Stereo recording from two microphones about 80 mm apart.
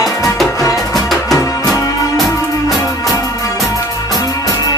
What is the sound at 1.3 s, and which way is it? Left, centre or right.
Music, left.